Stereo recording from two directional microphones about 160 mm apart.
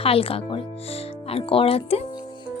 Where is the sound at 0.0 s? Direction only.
35° left (ahead or behind).